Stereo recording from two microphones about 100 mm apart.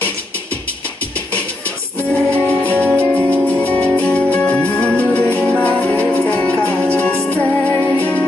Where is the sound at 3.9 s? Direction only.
15° left (ahead or behind).